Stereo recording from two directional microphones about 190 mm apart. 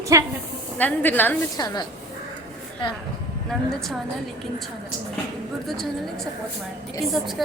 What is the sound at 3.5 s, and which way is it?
Speech, centre (ahead or behind).